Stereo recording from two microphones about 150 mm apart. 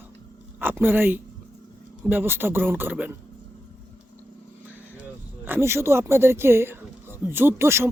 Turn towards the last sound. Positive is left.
turn(degrees=-15)  # may be behind; listen again after turning